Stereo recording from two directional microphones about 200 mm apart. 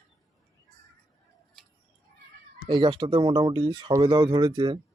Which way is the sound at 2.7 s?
25° right (ahead or behind).